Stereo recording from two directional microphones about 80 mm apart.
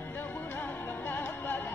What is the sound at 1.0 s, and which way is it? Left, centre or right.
Music, left.